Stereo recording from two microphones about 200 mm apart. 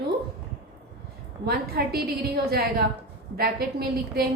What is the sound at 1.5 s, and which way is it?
A woman's voice, 50° right (ahead or behind).